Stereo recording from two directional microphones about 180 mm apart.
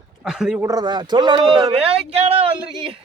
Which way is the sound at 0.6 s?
20° right (ahead or behind).